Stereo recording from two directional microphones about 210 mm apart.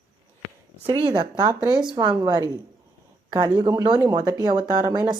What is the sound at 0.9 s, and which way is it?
Speech, 25° right (ahead or behind).